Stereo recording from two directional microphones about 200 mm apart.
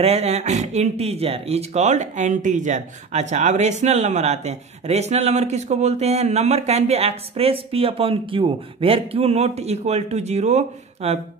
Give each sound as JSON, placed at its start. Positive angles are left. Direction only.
{"t": 0.0, "sound": "speech", "side_deg": -30}